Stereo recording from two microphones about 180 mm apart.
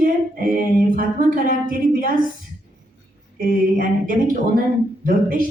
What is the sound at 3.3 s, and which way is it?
Speech, 50° right (ahead or behind).